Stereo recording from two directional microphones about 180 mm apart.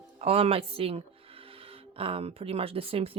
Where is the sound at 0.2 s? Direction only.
35° right (ahead or behind).